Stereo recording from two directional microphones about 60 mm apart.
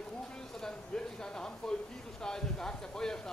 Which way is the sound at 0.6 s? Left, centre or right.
Centre.